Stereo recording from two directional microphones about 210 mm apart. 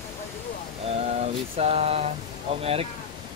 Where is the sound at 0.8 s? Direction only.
30° right (ahead or behind).